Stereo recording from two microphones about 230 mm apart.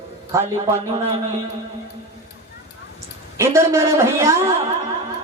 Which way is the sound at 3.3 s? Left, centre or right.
Centre.